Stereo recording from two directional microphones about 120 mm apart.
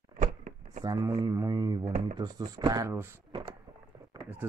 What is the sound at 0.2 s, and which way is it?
Power windows, 70° right (ahead or behind).